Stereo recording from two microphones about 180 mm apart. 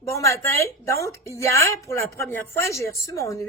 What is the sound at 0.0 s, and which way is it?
Speech, 15° left (ahead or behind).